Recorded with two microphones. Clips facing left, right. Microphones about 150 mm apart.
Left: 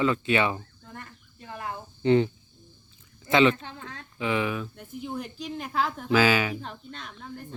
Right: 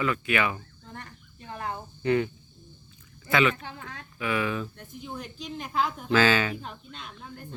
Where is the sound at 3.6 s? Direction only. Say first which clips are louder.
Even; 15° right (ahead or behind).